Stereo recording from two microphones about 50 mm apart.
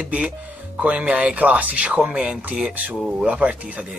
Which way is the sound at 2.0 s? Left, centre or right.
Centre.